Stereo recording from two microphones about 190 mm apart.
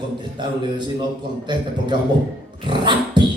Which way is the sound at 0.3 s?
25° right (ahead or behind).